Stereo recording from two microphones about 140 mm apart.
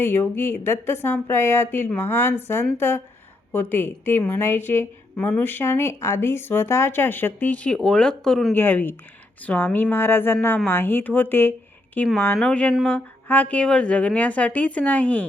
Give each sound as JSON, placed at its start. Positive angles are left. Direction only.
{"t": 0.0, "sound": "a woman's voice", "side_deg": 15}
{"t": 8.5, "sound": "a woman's voice", "side_deg": 15}